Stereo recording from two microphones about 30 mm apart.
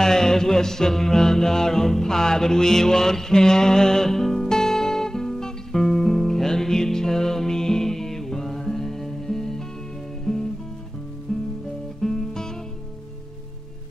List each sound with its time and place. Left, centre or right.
0.0 s music: centre